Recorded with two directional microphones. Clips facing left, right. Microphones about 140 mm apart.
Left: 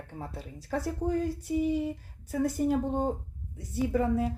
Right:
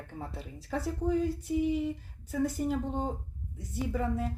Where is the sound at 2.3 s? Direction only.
5° left (ahead or behind).